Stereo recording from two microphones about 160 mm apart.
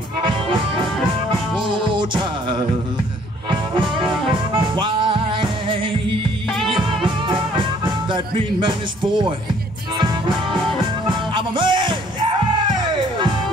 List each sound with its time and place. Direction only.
0.2 s music: 30° right (ahead or behind)
1.7 s music: 30° right (ahead or behind)
4.7 s music: 30° right (ahead or behind)